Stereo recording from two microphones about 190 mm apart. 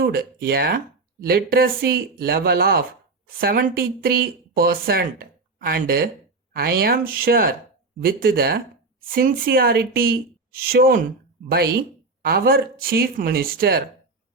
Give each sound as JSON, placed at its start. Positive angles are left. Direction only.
{"t": 0.0, "sound": "speech", "side_deg": -50}